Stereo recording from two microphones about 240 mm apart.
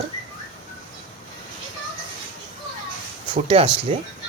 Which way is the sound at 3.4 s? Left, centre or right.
Right.